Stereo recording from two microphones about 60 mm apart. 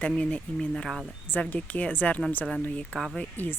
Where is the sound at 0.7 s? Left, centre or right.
Centre.